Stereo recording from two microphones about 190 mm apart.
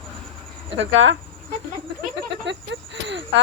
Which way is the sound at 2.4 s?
70° right (ahead or behind).